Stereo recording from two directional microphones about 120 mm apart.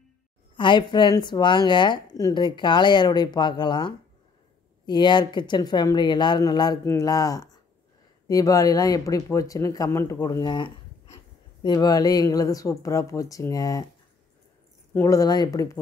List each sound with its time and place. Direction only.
0.6 s a woman's voice: 40° left (ahead or behind)
6.8 s speech: 25° left (ahead or behind)
11.6 s speech: 35° left (ahead or behind)
15.0 s speech: 30° left (ahead or behind)